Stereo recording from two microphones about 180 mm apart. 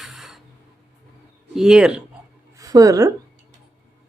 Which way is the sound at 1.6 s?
5° right (ahead or behind).